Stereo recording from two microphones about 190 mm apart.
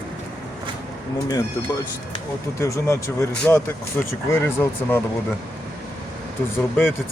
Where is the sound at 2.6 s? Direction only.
15° left (ahead or behind).